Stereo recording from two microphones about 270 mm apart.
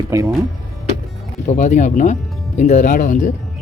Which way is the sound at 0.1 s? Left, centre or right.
Centre.